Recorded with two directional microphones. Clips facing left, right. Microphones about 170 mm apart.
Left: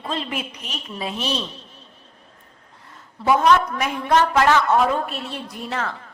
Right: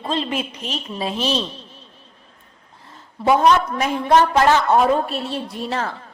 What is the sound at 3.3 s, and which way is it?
Speech, 30° right (ahead or behind).